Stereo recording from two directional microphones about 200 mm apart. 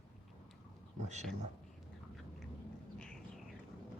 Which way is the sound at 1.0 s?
35° right (ahead or behind).